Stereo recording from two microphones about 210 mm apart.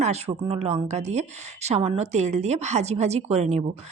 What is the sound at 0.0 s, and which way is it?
A woman's voice, 30° right (ahead or behind).